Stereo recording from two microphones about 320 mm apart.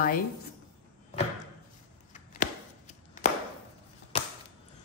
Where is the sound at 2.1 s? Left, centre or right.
Left.